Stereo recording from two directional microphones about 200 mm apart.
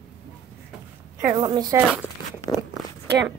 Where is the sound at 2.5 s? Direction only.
15° left (ahead or behind).